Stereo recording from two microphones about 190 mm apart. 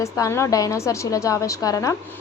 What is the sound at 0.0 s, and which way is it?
A woman's voice, 15° left (ahead or behind).